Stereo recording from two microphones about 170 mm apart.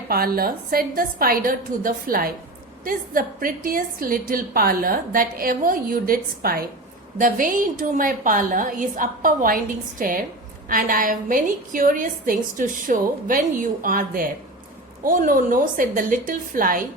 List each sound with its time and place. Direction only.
0.1 s a woman's voice: 60° right (ahead or behind)